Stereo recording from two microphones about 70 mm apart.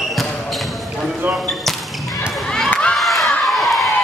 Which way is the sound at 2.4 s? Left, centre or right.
Centre.